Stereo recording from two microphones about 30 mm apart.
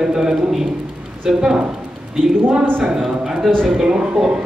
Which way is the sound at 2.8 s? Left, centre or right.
Centre.